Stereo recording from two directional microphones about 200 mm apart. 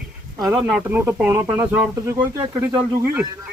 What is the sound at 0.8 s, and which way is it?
Speech, 10° right (ahead or behind).